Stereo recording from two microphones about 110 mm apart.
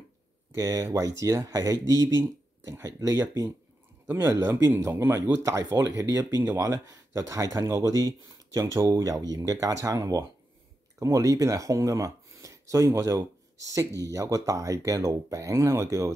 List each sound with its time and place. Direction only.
0.6 s speech: 35° right (ahead or behind)